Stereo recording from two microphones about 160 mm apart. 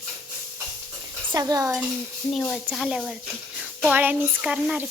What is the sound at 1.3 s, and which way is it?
Speech, 20° right (ahead or behind).